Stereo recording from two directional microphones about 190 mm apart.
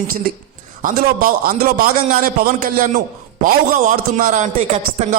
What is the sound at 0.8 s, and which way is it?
A man's voice, 45° right (ahead or behind).